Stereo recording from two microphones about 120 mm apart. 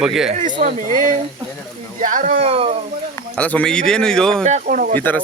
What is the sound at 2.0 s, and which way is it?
Speech, 90° right.